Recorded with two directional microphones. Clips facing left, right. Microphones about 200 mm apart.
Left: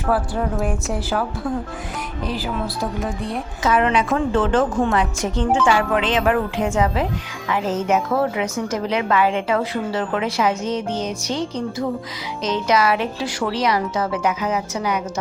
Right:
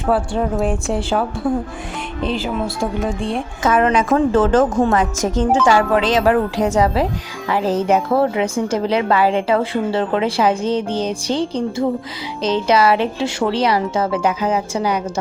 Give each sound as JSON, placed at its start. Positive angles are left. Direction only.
{"t": 0.1, "sound": "speech", "side_deg": -25}
{"t": 2.2, "sound": "speech", "side_deg": -25}
{"t": 3.6, "sound": "a woman's voice", "side_deg": -45}